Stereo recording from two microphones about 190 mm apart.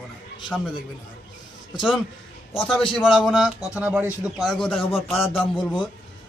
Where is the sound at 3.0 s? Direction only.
Centre (ahead or behind).